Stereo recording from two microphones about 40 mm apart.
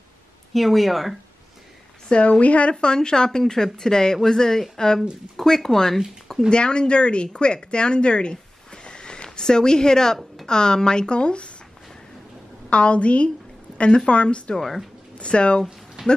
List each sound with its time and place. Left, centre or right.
0.5 s speech: centre
2.0 s a woman's voice: left
2.7 s speech: left
6.5 s a woman's voice: left
8.8 s a sound: left
10.4 s a woman's voice: centre
12.6 s a woman's voice: left
16.0 s a sound: centre